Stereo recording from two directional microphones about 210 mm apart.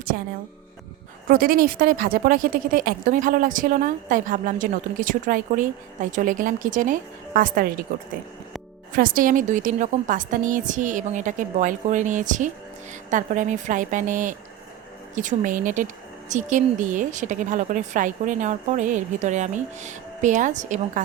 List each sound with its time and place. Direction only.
0.1 s a woman's voice: 45° right (ahead or behind)
1.3 s a woman's voice: 45° right (ahead or behind)
9.0 s a woman's voice: 40° right (ahead or behind)